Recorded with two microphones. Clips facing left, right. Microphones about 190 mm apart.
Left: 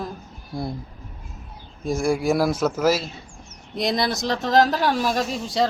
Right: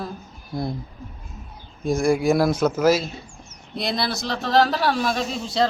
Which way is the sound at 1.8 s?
5° left (ahead or behind).